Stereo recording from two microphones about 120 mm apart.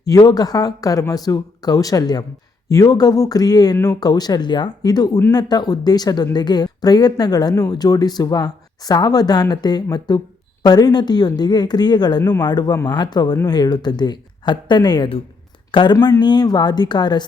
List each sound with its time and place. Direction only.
0.0 s speech: 30° left (ahead or behind)